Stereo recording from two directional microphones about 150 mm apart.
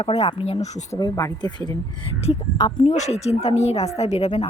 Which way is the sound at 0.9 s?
25° left (ahead or behind).